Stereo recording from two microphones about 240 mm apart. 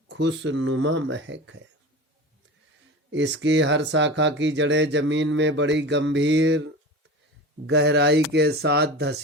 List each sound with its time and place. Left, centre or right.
0.1 s speech: right
3.1 s speech: right
7.7 s speech: right